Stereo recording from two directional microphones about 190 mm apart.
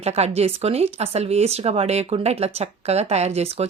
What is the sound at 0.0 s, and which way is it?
Speech, 35° right (ahead or behind).